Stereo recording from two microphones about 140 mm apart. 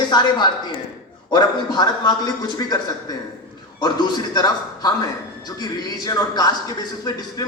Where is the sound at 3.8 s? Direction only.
30° left (ahead or behind).